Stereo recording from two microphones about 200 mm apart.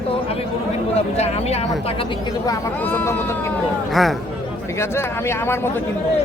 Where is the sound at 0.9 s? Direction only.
30° left (ahead or behind).